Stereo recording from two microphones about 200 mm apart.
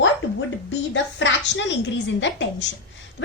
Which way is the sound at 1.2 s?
65° left (ahead or behind).